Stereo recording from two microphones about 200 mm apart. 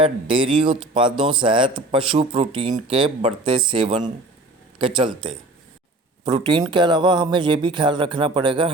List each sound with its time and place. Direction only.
0.0 s speech: 25° right (ahead or behind)